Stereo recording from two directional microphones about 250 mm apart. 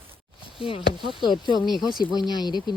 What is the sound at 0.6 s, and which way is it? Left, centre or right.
Speech, left.